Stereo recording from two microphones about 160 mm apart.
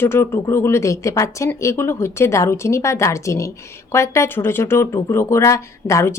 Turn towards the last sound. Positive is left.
turn(degrees=20)  # may be behind; listen again after turning